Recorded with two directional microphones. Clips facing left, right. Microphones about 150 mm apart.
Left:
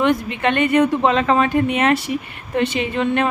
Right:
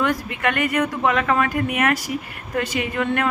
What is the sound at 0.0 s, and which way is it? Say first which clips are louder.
A woman's voice: left 4 dB; 25° left (ahead or behind).